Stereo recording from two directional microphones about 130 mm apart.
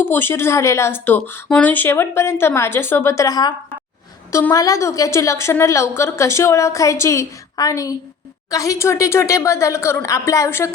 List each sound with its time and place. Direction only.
0.0 s a woman's voice: 15° left (ahead or behind)